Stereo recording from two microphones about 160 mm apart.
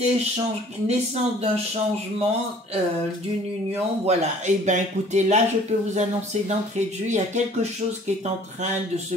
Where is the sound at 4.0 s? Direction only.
45° right (ahead or behind).